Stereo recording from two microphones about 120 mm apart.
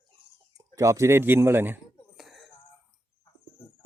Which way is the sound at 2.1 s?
Centre (ahead or behind).